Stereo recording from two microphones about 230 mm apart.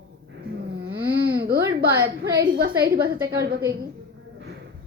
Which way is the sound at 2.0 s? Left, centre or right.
Right.